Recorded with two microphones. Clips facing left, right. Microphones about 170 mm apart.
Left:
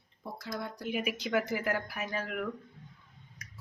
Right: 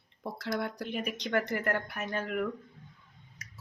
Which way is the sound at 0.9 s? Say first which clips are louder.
Left 1 dB; 5° left (ahead or behind).